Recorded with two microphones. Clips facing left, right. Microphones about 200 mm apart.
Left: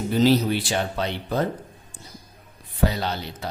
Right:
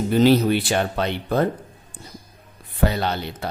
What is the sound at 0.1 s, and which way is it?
Speech, 60° right (ahead or behind).